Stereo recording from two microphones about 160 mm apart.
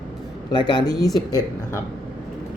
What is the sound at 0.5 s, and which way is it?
Speech, 25° left (ahead or behind).